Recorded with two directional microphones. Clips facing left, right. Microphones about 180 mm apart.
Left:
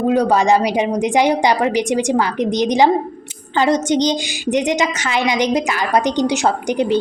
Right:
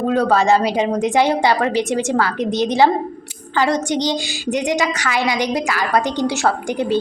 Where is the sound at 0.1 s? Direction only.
15° left (ahead or behind).